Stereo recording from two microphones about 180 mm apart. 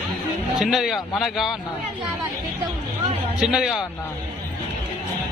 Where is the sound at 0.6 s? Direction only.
Centre (ahead or behind).